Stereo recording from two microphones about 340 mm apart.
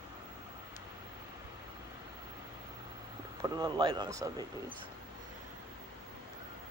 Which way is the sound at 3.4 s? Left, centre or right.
Centre.